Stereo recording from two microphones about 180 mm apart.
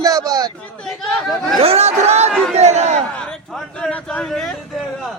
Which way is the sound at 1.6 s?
35° right (ahead or behind).